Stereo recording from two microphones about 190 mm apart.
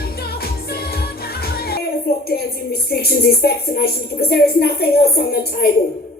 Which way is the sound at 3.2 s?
55° left (ahead or behind).